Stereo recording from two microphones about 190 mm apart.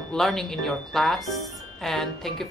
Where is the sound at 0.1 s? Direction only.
Centre (ahead or behind).